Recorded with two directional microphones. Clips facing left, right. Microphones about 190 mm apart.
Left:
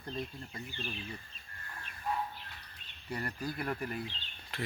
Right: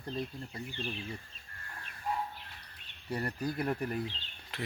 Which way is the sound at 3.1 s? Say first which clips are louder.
Right 3 dB; 30° right (ahead or behind).